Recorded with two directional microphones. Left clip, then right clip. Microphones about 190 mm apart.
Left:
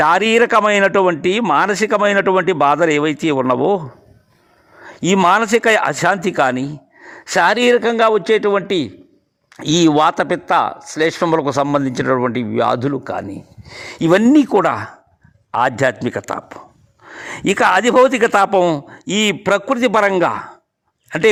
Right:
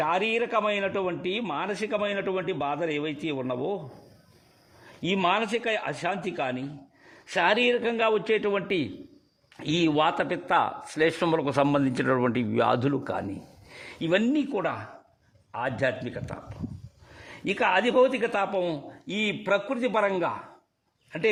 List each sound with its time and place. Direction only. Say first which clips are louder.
0.0 s speech: left 13 dB; 45° left (ahead or behind)
4.9 s a man's voice: left 12 dB; 40° left (ahead or behind); by 13.2 s 15° left (ahead or behind)
13.7 s speech: left 13 dB; 35° left (ahead or behind)